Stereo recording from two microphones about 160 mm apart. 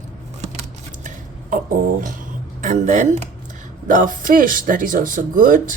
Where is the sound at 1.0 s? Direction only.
60° right (ahead or behind).